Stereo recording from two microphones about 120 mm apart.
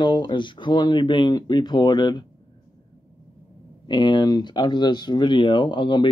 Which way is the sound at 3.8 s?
40° left (ahead or behind).